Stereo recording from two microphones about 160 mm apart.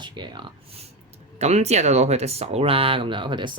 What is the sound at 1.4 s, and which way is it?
Speech, 45° right (ahead or behind).